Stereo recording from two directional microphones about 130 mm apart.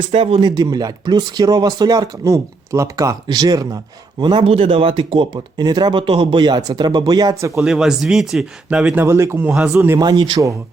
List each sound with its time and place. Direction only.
0.1 s speech: 45° right (ahead or behind)
0.5 s speech: 30° right (ahead or behind)
7.6 s speech: 5° right (ahead or behind)
9.0 s speech: 20° right (ahead or behind)
9.5 s speech: 5° right (ahead or behind)
9.7 s speech: 20° right (ahead or behind)
10.0 s speech: 35° right (ahead or behind)